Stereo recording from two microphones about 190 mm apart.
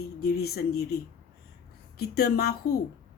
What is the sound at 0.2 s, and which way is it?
Speech, 55° left (ahead or behind).